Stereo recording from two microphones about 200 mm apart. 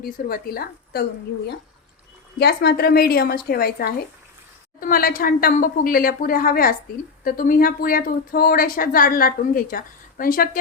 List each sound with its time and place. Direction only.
0.0 s a woman's voice: 45° left (ahead or behind)
2.4 s a woman's voice: 55° left (ahead or behind)